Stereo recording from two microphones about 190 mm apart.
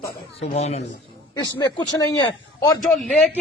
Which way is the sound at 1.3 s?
20° left (ahead or behind).